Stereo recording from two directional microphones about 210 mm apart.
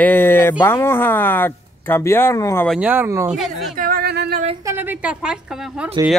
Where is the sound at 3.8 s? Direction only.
45° right (ahead or behind).